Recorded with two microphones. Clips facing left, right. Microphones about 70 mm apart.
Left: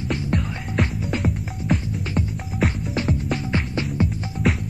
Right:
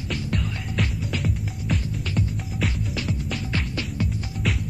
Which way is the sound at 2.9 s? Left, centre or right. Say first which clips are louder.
Left 5 dB; left.